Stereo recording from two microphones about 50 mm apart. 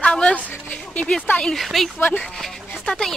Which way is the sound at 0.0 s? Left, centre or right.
Left.